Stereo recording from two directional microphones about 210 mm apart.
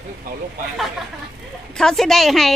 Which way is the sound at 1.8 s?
Centre (ahead or behind).